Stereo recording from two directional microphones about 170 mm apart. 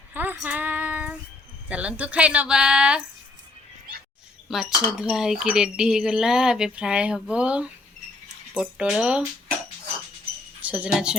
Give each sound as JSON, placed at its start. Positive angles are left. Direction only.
{"t": 0.1, "sound": "child singing", "side_deg": -10}
{"t": 1.6, "sound": "a woman's voice", "side_deg": -5}
{"t": 4.4, "sound": "speech", "side_deg": -5}
{"t": 10.6, "sound": "wind chime", "side_deg": -10}